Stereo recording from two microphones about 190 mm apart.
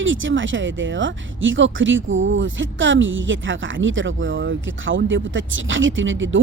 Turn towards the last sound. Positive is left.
turn(degrees=-90)